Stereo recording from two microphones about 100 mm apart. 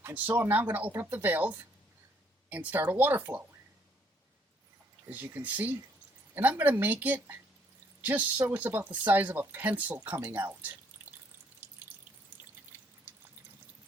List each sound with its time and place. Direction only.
0.1 s speech: 15° right (ahead or behind)
5.0 s speech: 20° right (ahead or behind)